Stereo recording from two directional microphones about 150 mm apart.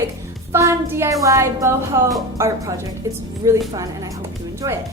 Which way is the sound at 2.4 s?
15° right (ahead or behind).